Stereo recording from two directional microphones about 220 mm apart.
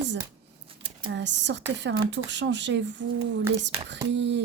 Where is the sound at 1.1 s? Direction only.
55° right (ahead or behind).